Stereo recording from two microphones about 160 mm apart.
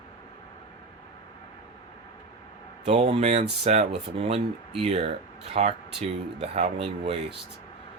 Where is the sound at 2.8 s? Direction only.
40° right (ahead or behind).